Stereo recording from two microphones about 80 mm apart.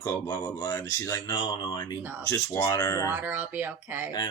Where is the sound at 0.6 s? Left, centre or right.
Left.